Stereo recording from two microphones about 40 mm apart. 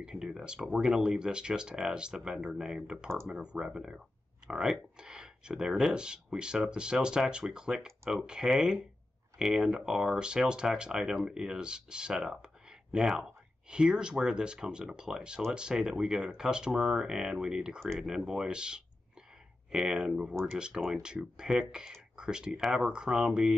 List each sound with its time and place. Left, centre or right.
0.0 s speech: centre
7.8 s speech: centre
8.2 s speech: centre